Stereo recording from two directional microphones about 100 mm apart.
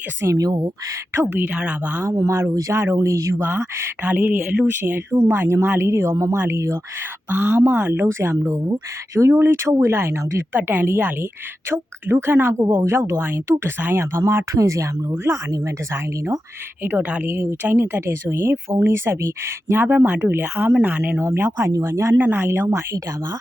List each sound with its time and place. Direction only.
0.2 s speech: 30° right (ahead or behind)
1.1 s speech: 25° right (ahead or behind)
2.0 s speech: 30° right (ahead or behind)
3.4 s speech: 20° right (ahead or behind)
16.8 s speech: 15° right (ahead or behind)